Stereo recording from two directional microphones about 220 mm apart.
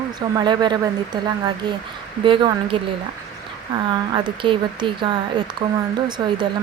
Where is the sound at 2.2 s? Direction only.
20° right (ahead or behind).